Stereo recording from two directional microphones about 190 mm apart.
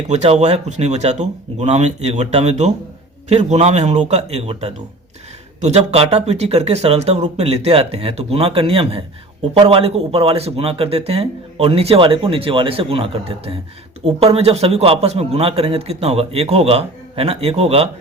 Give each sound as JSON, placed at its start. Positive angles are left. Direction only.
{"t": 0.1, "sound": "speech", "side_deg": -35}